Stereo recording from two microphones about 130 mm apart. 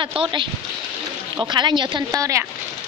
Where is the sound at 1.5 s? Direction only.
35° right (ahead or behind).